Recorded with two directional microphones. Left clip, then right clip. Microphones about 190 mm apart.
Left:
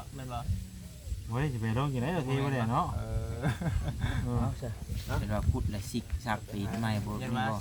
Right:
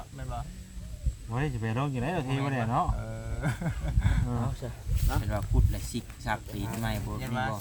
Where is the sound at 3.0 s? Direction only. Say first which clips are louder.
Right 1 dB; 5° right (ahead or behind).